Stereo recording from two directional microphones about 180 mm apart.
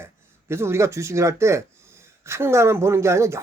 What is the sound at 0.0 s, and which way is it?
Speech, 15° right (ahead or behind).